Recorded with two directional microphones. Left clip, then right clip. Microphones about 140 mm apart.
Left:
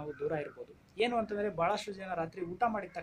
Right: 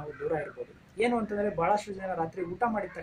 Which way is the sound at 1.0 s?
15° left (ahead or behind).